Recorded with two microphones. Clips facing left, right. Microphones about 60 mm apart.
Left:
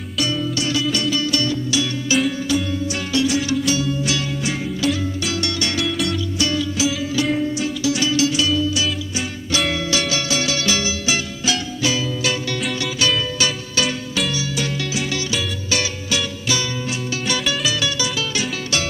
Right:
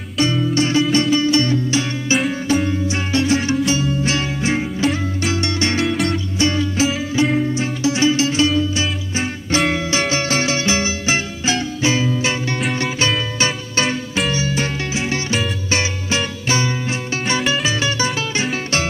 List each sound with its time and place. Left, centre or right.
0.2 s music: right